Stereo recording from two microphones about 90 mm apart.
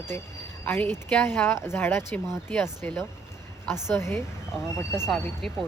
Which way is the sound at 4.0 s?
30° left (ahead or behind).